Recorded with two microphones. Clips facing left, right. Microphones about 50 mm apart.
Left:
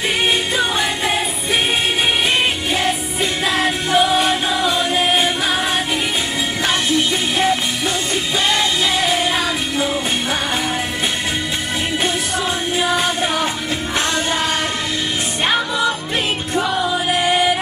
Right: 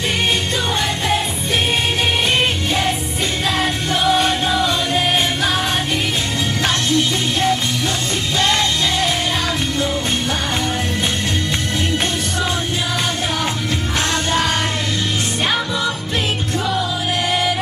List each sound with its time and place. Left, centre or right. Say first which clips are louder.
3.5 s music: left 3 dB; centre
6.9 s music: even; centre
16.5 s music: left 4 dB; centre